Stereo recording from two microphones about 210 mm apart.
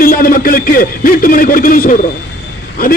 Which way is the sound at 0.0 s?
45° left (ahead or behind).